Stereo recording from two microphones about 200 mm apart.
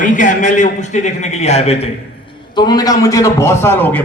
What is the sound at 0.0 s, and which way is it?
A man's voice, 40° left (ahead or behind).